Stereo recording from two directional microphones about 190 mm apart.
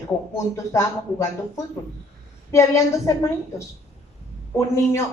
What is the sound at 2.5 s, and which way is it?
Speech, 15° left (ahead or behind).